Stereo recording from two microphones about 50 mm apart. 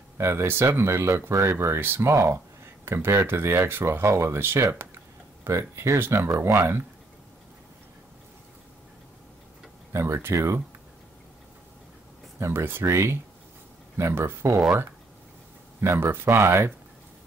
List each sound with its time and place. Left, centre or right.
0.2 s speech: right
0.5 s speech: right
1.8 s speech: right
3.8 s speech: right
4.4 s speech: right
4.7 s a sound: right
5.5 s speech: right
9.9 s speech: right
12.4 s speech: right
12.6 s speech: right
12.9 s speech: right
13.9 s speech: right
15.8 s speech: right